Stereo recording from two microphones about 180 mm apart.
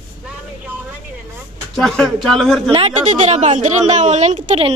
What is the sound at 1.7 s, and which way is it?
Speech, centre (ahead or behind).